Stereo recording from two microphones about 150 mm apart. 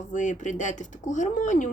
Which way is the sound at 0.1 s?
55° left (ahead or behind).